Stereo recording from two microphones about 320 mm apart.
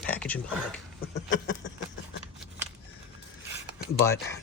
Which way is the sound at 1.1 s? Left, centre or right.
Left.